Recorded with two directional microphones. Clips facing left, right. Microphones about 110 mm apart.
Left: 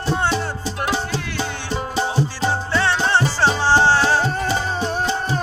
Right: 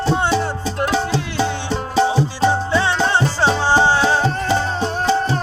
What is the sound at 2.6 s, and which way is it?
Music, 20° right (ahead or behind).